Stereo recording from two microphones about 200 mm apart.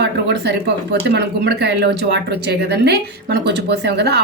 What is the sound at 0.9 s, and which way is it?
Speech, 55° right (ahead or behind).